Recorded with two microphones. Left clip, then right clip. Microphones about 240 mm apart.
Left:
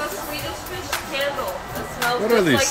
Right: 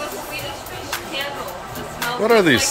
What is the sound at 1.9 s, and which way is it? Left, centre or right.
Music, centre.